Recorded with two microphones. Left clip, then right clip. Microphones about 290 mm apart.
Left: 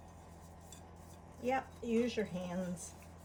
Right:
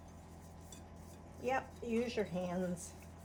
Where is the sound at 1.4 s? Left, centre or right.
Centre.